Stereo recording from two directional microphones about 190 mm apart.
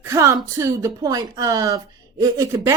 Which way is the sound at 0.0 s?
15° right (ahead or behind).